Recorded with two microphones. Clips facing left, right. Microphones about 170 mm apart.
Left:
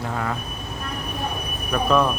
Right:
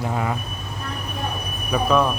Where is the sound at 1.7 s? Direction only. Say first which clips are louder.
Right 1 dB; 5° right (ahead or behind).